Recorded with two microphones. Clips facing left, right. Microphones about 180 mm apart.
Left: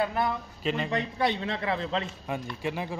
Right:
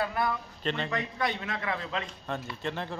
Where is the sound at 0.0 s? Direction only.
20° left (ahead or behind).